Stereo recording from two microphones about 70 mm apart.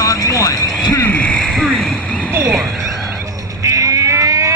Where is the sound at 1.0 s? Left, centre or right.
Left.